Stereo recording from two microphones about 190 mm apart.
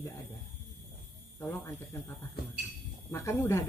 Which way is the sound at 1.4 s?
15° left (ahead or behind).